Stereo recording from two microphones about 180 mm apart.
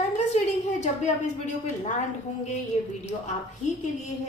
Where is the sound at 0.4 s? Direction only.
35° left (ahead or behind).